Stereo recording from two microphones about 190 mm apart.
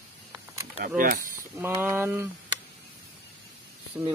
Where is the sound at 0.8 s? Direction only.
45° right (ahead or behind).